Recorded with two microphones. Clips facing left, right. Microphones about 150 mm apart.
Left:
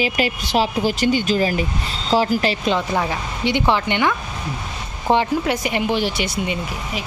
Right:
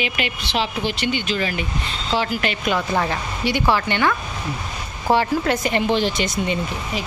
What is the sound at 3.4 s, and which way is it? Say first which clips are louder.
Speech: left 1 dB; 20° left (ahead or behind).